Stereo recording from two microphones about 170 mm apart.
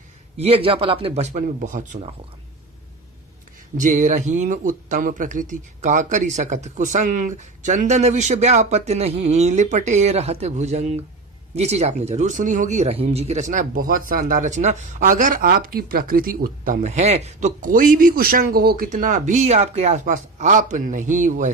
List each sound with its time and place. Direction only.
0.3 s speech: 35° right (ahead or behind)
3.8 s speech: 50° right (ahead or behind)